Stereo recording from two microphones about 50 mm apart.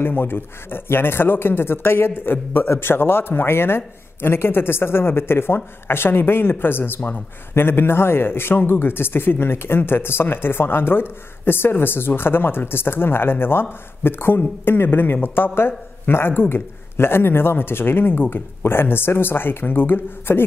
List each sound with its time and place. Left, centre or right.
0.0 s a man's voice: left